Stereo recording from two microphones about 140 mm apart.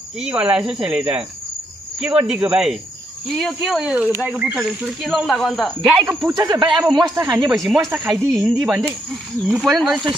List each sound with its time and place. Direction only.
0.2 s speech: 10° right (ahead or behind)
6.3 s speech: 30° right (ahead or behind)
7.2 s speech: 5° right (ahead or behind)